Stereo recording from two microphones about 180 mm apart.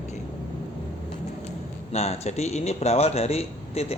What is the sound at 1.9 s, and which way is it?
A man's voice, 35° left (ahead or behind).